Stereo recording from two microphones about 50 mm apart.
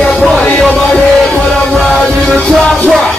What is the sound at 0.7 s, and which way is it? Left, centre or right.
Music, centre.